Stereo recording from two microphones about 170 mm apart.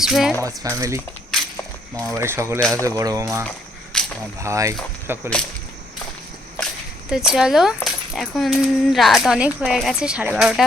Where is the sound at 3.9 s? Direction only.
5° left (ahead or behind).